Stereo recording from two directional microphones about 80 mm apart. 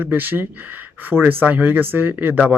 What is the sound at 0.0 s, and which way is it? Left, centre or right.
Speech, right.